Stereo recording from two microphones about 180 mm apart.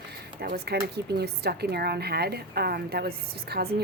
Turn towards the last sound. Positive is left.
turn(degrees=-60)  # may be behind; listen again after turning